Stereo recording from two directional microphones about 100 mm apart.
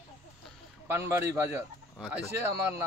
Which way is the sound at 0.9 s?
25° right (ahead or behind).